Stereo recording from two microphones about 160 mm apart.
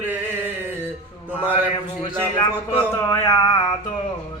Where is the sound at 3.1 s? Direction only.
20° left (ahead or behind).